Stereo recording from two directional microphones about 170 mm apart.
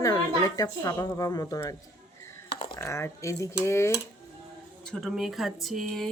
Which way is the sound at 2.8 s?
15° left (ahead or behind).